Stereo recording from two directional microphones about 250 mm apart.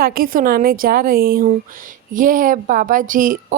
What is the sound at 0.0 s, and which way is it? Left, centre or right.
A woman's voice, right.